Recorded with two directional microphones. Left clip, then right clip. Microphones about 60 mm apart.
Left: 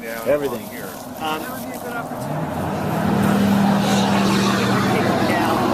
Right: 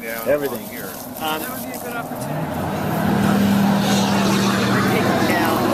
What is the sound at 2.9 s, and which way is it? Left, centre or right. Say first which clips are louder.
Vehicle: even; left.